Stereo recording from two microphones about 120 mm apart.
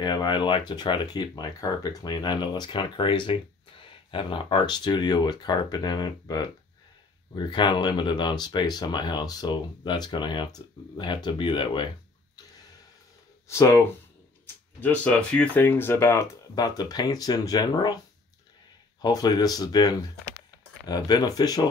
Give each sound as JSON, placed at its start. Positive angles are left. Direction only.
{"t": 0.0, "sound": "speech", "side_deg": 40}
{"t": 13.5, "sound": "speech", "side_deg": 25}
{"t": 18.9, "sound": "speech", "side_deg": 35}